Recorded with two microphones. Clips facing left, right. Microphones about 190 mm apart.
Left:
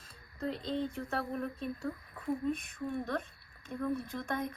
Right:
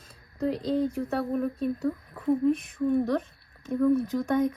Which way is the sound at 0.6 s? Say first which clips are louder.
Right 9 dB; 35° right (ahead or behind).